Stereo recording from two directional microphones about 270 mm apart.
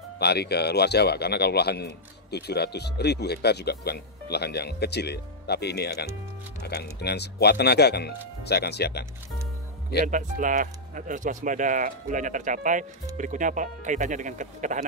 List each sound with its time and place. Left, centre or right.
0.2 s a man's voice: left
10.0 s speech: right